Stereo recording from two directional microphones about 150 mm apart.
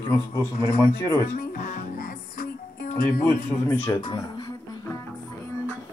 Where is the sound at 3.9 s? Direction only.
15° left (ahead or behind).